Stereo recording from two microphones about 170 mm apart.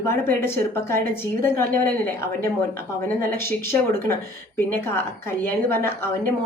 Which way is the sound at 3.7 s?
15° left (ahead or behind).